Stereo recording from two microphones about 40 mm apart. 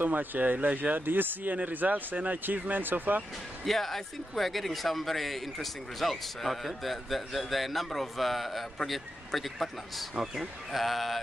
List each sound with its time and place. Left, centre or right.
0.0 s speech: right
3.6 s speech: centre
10.1 s speech: centre